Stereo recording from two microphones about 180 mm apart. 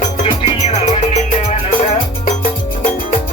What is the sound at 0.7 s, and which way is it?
Music, 40° left (ahead or behind).